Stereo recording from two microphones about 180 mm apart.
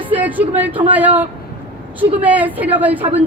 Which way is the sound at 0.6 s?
10° right (ahead or behind).